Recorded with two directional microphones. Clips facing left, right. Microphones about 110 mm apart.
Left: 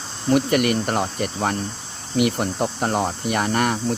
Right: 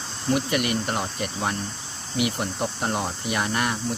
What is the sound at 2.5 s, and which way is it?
Speech, 50° left (ahead or behind).